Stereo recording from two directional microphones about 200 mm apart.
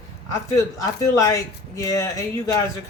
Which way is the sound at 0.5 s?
15° left (ahead or behind).